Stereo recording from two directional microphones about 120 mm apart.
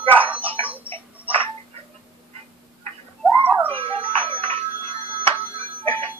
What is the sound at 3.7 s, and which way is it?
Music, 50° right (ahead or behind).